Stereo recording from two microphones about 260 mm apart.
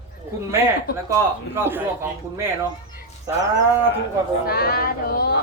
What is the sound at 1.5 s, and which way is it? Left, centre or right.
Speech, centre.